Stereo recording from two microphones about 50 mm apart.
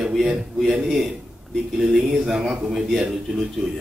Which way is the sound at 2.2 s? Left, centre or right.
Centre.